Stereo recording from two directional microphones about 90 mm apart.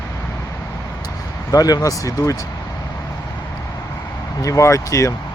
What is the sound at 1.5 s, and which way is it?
Speech, 45° left (ahead or behind).